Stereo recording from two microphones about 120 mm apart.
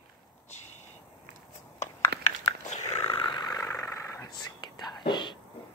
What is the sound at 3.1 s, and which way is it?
Whispering, 45° left (ahead or behind).